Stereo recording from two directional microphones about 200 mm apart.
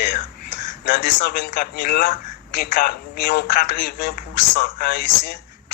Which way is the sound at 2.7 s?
50° left (ahead or behind).